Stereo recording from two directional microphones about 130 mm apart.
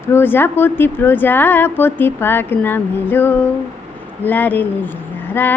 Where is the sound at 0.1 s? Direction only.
15° left (ahead or behind).